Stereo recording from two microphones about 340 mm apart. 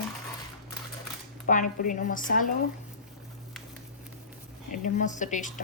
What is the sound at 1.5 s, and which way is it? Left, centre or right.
A woman's voice, left.